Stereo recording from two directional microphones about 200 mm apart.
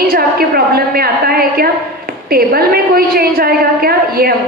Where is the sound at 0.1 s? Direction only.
50° right (ahead or behind).